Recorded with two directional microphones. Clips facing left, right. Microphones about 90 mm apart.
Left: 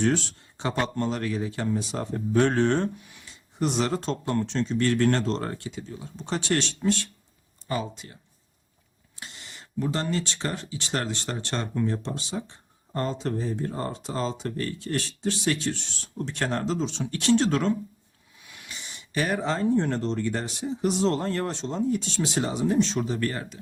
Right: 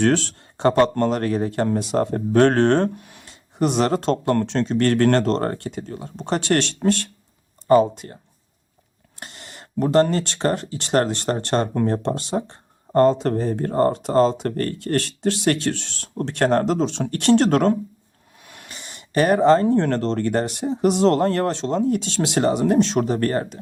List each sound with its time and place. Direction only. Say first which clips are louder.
0.0 s speech: right 6 dB; 70° right (ahead or behind)
7.7 s speech: right 15 dB; 45° right (ahead or behind)